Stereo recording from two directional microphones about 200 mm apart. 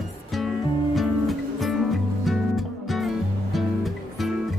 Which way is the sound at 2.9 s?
Centre (ahead or behind).